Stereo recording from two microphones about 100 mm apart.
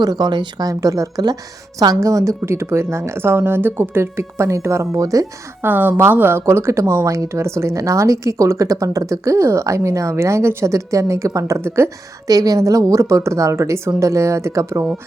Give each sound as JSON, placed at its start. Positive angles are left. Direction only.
{"t": 0.0, "sound": "a woman's voice", "side_deg": -45}
{"t": 0.7, "sound": "a woman's voice", "side_deg": -35}
{"t": 5.6, "sound": "a woman's voice", "side_deg": -20}